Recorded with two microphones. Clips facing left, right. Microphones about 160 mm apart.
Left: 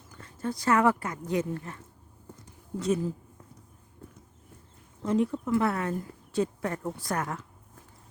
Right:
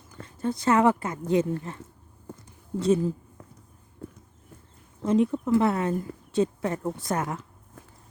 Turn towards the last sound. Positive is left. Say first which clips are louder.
# right 5 dB
turn(degrees=-90)